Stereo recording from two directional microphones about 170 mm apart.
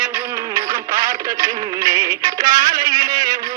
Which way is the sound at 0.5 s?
15° right (ahead or behind).